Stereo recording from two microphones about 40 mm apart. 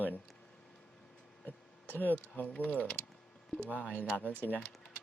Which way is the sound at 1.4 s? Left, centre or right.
Left.